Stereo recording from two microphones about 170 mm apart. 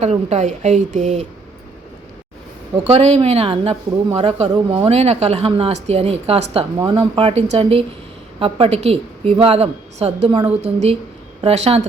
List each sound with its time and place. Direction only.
0.0 s a woman's voice: 40° right (ahead or behind)
2.7 s a woman's voice: 35° right (ahead or behind)